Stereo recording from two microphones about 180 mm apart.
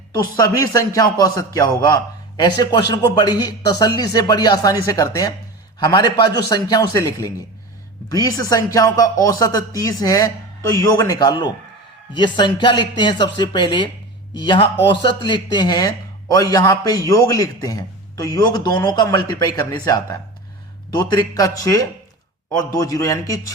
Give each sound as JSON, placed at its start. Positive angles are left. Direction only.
{"t": 0.3, "sound": "speech", "side_deg": 20}